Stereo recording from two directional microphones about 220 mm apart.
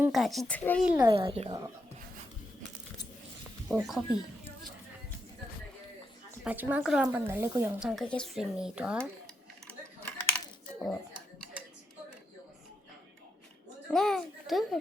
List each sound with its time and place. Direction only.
0.0 s speech: centre (ahead or behind)
0.9 s speech: 20° right (ahead or behind)
3.7 s speech: centre (ahead or behind)
6.4 s speech: 10° right (ahead or behind)
9.6 s a sound: 5° left (ahead or behind)
13.8 s a child's voice: centre (ahead or behind)